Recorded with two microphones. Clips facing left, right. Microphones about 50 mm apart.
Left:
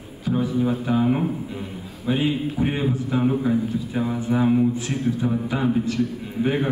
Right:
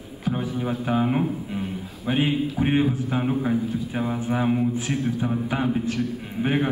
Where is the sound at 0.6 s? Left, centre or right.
Right.